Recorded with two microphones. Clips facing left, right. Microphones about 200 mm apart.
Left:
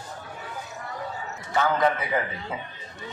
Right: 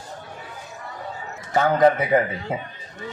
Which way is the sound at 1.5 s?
45° right (ahead or behind).